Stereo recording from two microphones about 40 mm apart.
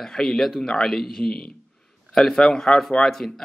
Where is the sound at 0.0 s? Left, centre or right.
Centre.